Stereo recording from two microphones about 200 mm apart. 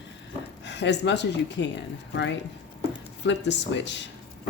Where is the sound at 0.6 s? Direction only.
60° left (ahead or behind).